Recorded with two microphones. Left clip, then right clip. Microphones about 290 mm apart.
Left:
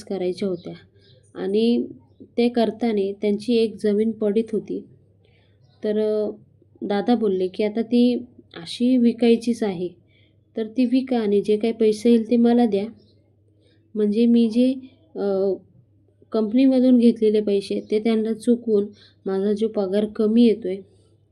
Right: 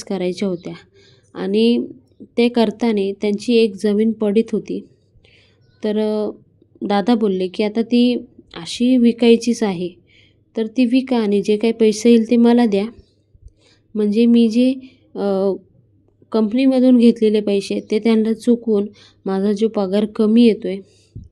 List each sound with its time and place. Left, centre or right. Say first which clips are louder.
0.0 s speech: right 3 dB; right
5.8 s speech: right 2 dB; right